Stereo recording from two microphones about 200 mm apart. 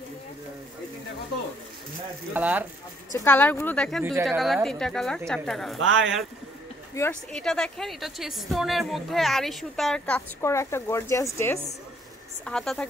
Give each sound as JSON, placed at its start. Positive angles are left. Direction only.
{"t": 2.3, "sound": "speech", "side_deg": -10}
{"t": 3.1, "sound": "a woman's voice", "side_deg": 10}
{"t": 7.0, "sound": "a woman's voice", "side_deg": 5}